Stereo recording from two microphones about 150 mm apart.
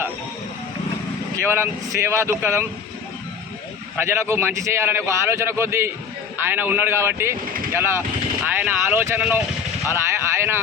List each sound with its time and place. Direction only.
1.4 s a man's voice: 15° right (ahead or behind)
3.9 s a man's voice: 15° right (ahead or behind)
9.8 s a sound: 15° right (ahead or behind)